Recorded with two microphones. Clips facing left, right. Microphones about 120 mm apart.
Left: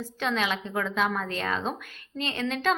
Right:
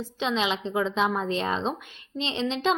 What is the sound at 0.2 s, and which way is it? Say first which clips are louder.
A woman's voice: right 2 dB; 20° right (ahead or behind).